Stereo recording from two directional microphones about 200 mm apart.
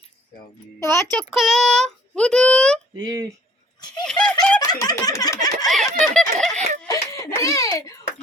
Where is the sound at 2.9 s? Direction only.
20° right (ahead or behind).